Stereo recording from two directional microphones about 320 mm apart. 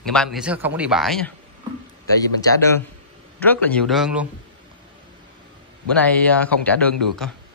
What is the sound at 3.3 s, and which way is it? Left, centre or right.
Speech, centre.